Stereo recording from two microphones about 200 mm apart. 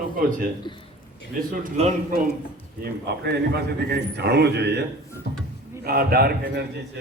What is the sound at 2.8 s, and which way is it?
A man's voice, 50° right (ahead or behind).